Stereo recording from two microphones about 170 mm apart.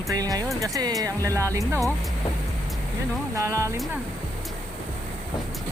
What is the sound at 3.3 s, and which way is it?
Speech, 15° right (ahead or behind).